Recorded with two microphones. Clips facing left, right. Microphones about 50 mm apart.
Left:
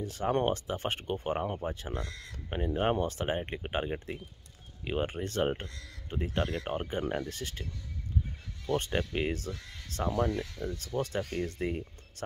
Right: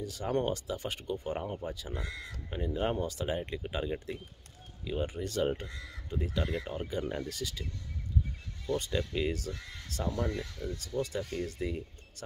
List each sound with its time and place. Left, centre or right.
0.0 s speech: left
2.0 s speech: centre
2.5 s speech: left
3.9 s speech: left
5.0 s speech: left
5.7 s speech: centre
6.0 s speech: left
6.6 s speech: left
6.9 s speech: left
8.6 s speech: left